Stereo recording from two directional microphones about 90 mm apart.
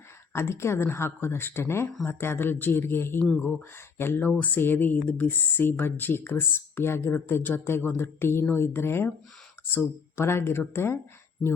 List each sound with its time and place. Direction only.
0.3 s speech: 30° left (ahead or behind)